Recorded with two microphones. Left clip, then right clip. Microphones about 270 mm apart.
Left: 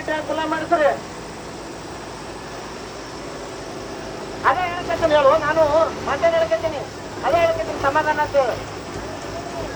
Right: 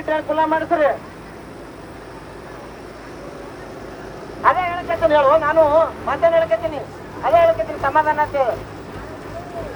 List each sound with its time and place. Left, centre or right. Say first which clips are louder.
0.1 s speech: right 5 dB; right
4.4 s speech: right 3 dB; right